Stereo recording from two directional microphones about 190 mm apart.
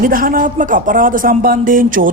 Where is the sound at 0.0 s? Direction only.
50° right (ahead or behind).